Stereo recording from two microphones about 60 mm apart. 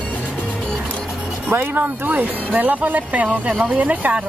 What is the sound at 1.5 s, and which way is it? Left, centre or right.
Speech, right.